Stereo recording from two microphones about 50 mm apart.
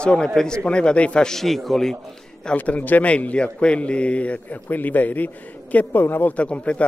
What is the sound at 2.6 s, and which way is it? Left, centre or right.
A man's voice, left.